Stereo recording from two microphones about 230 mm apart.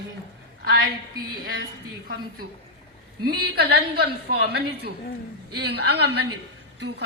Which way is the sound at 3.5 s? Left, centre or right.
Right.